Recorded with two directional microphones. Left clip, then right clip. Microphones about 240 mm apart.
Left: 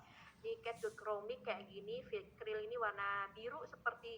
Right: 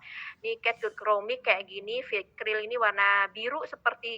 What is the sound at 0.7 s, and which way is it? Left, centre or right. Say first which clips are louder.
A woman's voice: right 17 dB; right.